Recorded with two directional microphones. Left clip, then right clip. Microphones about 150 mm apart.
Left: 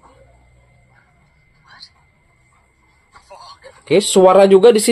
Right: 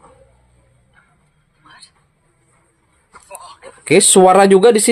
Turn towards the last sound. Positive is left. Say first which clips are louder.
# even
turn(degrees=-40)  # may be behind; listen again after turning